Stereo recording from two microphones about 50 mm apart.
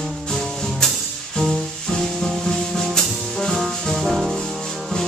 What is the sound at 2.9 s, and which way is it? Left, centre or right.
Music, centre.